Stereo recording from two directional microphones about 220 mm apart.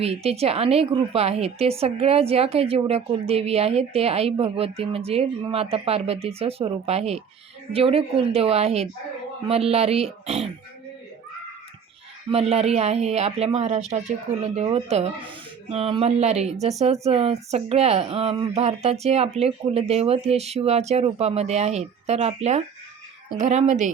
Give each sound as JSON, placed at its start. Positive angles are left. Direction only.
{"t": 0.0, "sound": "a woman's voice", "side_deg": -25}
{"t": 12.3, "sound": "a woman's voice", "side_deg": -25}